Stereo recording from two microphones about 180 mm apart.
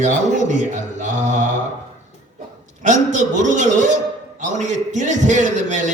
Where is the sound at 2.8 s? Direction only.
45° right (ahead or behind).